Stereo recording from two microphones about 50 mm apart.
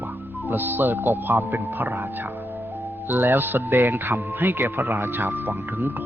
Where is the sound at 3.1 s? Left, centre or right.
Right.